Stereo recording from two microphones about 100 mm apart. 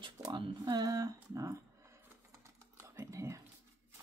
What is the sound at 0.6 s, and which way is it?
Speech, 35° right (ahead or behind).